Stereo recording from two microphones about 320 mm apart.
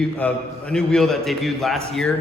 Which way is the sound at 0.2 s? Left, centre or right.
Centre.